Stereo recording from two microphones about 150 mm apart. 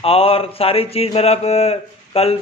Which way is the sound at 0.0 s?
40° left (ahead or behind).